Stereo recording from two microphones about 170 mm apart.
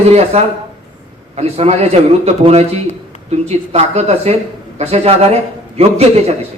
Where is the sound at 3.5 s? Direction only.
40° right (ahead or behind).